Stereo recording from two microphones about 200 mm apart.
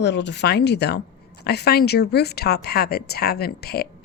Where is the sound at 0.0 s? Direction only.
60° left (ahead or behind).